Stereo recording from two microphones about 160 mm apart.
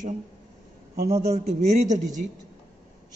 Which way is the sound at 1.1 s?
45° right (ahead or behind).